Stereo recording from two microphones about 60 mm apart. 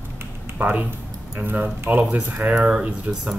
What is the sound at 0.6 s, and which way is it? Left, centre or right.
Speech, right.